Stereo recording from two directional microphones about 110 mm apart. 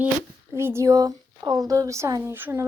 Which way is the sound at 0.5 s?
25° right (ahead or behind).